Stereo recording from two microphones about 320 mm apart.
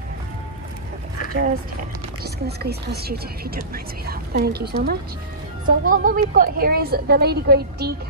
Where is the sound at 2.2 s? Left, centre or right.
Right.